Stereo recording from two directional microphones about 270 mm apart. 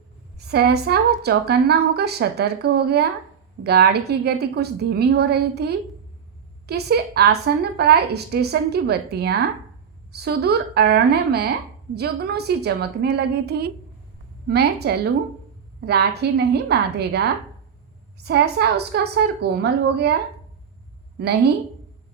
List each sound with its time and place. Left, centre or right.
0.3 s a woman's voice: right
21.2 s a woman's voice: right